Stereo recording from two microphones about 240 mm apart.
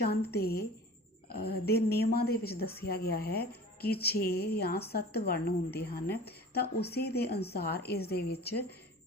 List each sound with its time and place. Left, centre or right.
0.0 s a woman's voice: left